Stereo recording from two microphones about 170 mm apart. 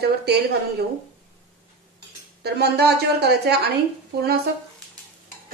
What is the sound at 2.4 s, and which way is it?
Speech, 75° right (ahead or behind).